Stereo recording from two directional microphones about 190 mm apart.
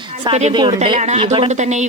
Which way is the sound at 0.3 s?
30° right (ahead or behind).